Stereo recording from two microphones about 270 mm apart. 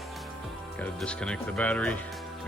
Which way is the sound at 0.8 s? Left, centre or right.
Centre.